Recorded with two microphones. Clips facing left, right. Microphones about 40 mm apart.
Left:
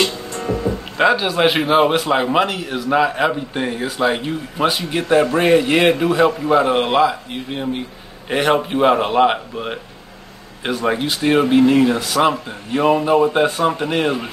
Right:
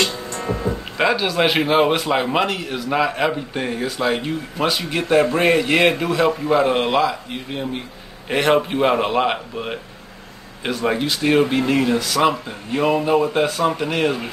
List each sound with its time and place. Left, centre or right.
0.4 s music: centre
0.7 s music: centre
1.1 s a man's voice: centre
1.4 s a man's voice: centre
5.3 s a man's voice: centre